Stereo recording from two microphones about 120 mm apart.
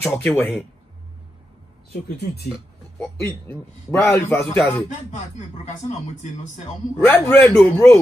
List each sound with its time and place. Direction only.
0.0 s a man's voice: 15° left (ahead or behind)
3.2 s a man's voice: 20° left (ahead or behind)
7.1 s a man's voice: 15° left (ahead or behind)